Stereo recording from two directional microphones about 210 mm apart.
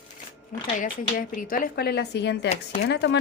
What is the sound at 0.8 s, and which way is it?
A woman's voice, 40° left (ahead or behind).